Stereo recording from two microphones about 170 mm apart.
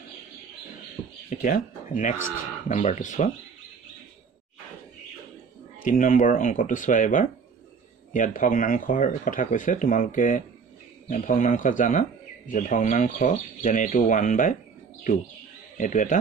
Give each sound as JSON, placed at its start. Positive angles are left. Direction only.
{"t": 1.3, "sound": "speech", "side_deg": 50}
{"t": 5.9, "sound": "speech", "side_deg": 50}
{"t": 15.8, "sound": "speech", "side_deg": 50}